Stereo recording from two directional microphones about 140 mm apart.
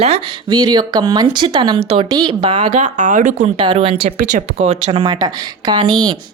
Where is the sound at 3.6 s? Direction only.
40° right (ahead or behind).